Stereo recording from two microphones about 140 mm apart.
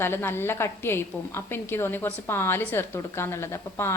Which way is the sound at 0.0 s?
15° left (ahead or behind).